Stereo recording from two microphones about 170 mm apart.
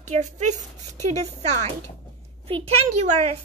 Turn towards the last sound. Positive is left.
turn(degrees=-35)  # may be behind; listen again after turning